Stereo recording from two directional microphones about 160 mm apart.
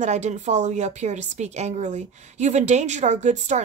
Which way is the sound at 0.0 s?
45° right (ahead or behind).